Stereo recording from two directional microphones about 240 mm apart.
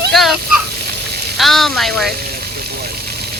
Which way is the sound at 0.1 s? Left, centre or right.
Centre.